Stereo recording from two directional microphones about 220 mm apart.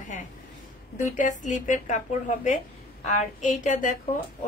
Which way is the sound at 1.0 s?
35° left (ahead or behind).